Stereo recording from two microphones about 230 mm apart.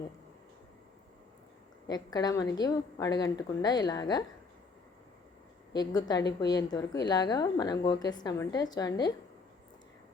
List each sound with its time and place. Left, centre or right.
1.9 s a woman's voice: centre
5.7 s a woman's voice: centre